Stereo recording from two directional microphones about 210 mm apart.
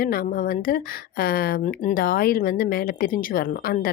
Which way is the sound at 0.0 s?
45° left (ahead or behind).